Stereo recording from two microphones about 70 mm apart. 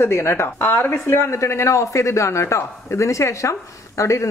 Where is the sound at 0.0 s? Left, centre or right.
Left.